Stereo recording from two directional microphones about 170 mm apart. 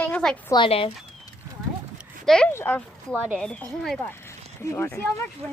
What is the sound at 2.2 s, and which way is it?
Speech, 5° left (ahead or behind).